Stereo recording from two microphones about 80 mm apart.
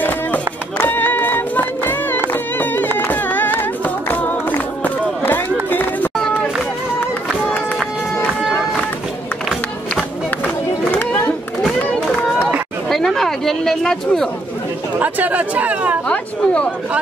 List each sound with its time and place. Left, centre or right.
0.0 s music: left
10.4 s run: left
12.9 s a sound: centre
15.0 s speech: right
16.1 s chatter: centre